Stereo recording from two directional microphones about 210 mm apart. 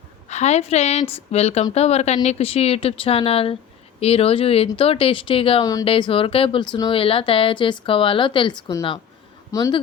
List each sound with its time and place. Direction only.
0.3 s a woman's voice: 30° left (ahead or behind); by 9.8 s 15° left (ahead or behind)